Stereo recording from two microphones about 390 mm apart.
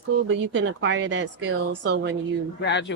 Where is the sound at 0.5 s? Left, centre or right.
Right.